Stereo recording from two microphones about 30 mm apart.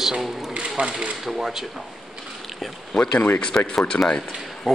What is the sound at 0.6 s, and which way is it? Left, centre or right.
Speech, right.